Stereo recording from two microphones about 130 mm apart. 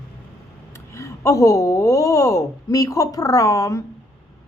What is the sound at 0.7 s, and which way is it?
Speech, 25° left (ahead or behind).